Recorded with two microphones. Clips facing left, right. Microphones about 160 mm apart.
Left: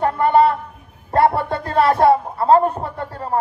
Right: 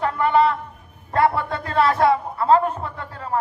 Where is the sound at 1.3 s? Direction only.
35° left (ahead or behind).